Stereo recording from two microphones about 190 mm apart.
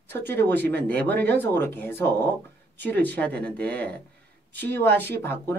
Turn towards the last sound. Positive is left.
turn(degrees=10)  # may be behind; listen again after turning